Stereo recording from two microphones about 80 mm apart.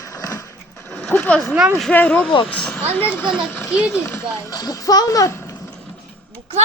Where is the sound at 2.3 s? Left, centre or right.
Left.